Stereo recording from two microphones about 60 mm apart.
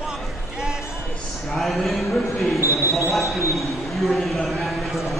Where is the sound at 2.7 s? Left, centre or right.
Right.